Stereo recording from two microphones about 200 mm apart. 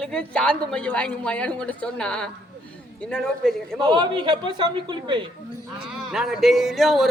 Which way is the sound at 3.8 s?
25° right (ahead or behind).